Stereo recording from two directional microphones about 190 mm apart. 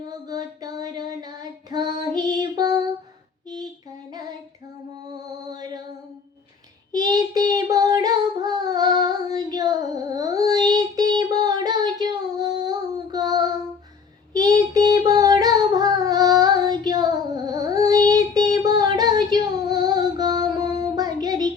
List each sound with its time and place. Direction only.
0.0 s child singing: 20° right (ahead or behind)
2.1 s music: 20° right (ahead or behind)
4.1 s child singing: 20° right (ahead or behind)
5.5 s music: 20° right (ahead or behind)
6.9 s child singing: 20° right (ahead or behind)
14.3 s singing: 20° right (ahead or behind)